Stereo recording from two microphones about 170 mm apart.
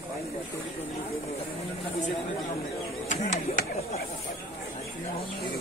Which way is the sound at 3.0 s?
45° left (ahead or behind).